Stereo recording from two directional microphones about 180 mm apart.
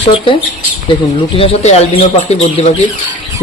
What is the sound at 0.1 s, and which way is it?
Speech, 30° left (ahead or behind).